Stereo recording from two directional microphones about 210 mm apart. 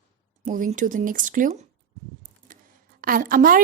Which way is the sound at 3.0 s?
40° right (ahead or behind).